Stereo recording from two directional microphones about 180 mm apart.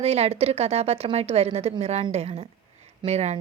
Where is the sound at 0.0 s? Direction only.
35° right (ahead or behind).